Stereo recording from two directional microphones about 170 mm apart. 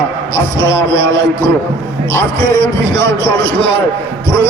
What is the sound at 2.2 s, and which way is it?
Speech, 15° left (ahead or behind).